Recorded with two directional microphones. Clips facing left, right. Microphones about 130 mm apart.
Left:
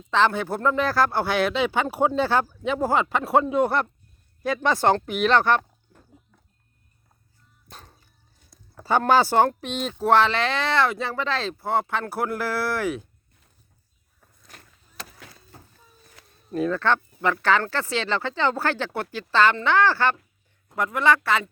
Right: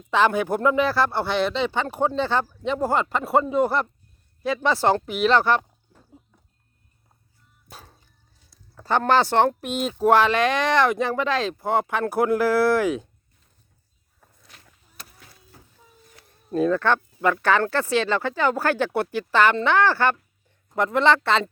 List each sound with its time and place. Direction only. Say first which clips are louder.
0.1 s speech: right 2 dB; 15° right (ahead or behind)
7.7 s dog: right 1 dB; 5° right (ahead or behind)
8.7 s speech: even; 5° left (ahead or behind); by 13.1 s 20° right (ahead or behind)
14.9 s a sound: left 6 dB; 90° left
16.5 s speech: right 2 dB; 20° right (ahead or behind)